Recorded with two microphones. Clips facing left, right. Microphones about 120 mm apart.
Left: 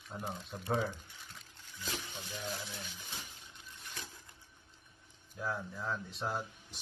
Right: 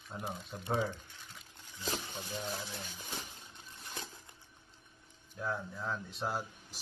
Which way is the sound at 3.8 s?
30° right (ahead or behind).